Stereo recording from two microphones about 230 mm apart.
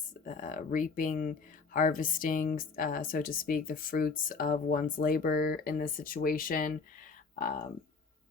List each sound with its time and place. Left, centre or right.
0.1 s speech: left